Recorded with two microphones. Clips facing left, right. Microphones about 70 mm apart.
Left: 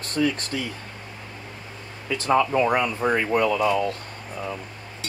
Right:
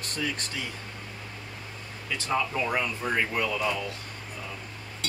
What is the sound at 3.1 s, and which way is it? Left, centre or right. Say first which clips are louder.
Speech: left 6 dB; left.